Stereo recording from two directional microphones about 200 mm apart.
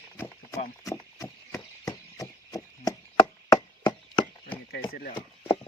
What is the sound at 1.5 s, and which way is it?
Chop, 20° left (ahead or behind).